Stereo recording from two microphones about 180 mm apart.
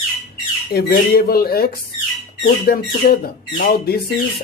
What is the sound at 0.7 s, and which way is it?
Speech, 60° left (ahead or behind).